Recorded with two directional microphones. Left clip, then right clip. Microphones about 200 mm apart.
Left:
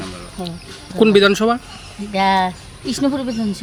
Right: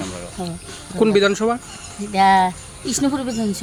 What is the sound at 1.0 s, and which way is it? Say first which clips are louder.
Speech: left 3 dB; 40° left (ahead or behind).